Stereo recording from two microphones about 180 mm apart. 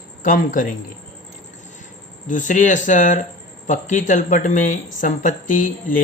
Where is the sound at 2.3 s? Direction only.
45° left (ahead or behind).